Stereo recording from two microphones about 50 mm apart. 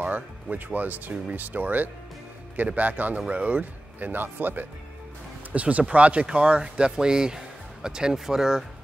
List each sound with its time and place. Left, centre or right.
0.7 s speech: right
5.5 s speech: right; by 8.6 s centre